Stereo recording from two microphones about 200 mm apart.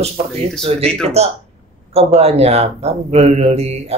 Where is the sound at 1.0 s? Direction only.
30° right (ahead or behind).